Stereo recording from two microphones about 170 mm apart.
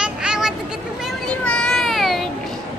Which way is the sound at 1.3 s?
5° left (ahead or behind).